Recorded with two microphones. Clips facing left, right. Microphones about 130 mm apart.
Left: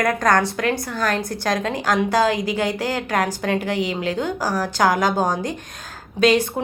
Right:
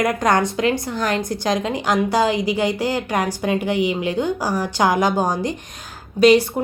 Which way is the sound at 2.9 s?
10° right (ahead or behind).